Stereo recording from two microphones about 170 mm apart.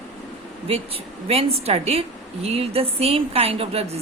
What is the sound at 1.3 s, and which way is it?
A woman's voice, 35° right (ahead or behind).